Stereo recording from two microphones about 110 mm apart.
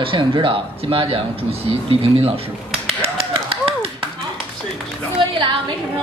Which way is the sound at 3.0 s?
60° right (ahead or behind).